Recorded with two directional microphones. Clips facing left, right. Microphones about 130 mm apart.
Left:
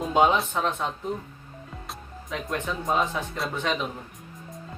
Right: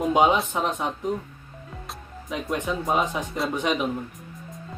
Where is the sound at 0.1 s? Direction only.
15° right (ahead or behind).